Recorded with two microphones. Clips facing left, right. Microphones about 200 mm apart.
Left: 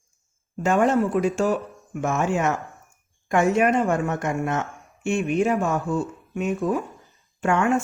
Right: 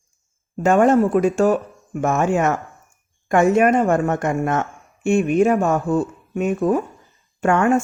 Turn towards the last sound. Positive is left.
turn(degrees=-50)  # may be behind; listen again after turning